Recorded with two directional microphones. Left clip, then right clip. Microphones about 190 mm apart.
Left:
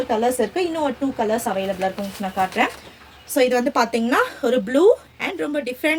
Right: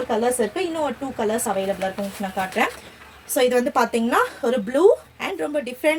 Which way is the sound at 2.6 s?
20° left (ahead or behind).